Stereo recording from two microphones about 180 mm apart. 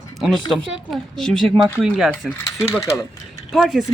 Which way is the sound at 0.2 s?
Centre (ahead or behind).